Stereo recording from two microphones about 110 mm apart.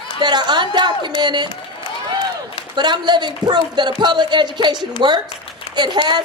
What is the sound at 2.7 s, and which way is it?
Speech, 45° right (ahead or behind).